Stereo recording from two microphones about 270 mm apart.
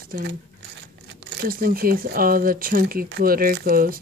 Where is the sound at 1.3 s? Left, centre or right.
Right.